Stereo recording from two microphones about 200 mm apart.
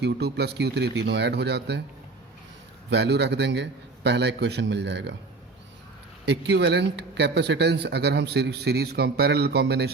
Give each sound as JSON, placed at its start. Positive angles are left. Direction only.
{"t": 0.0, "sound": "a man's voice", "side_deg": -55}
{"t": 2.9, "sound": "a man's voice", "side_deg": -55}
{"t": 6.2, "sound": "a man's voice", "side_deg": -60}